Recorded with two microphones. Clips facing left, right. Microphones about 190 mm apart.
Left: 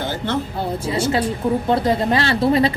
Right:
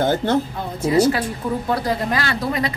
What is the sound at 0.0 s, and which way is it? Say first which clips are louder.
Speech: right 5 dB; 50° right (ahead or behind).